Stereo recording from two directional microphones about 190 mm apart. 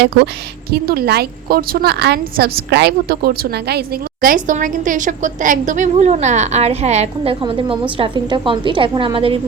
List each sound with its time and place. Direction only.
0.7 s a woman's voice: 55° right (ahead or behind); by 9.4 s 30° right (ahead or behind)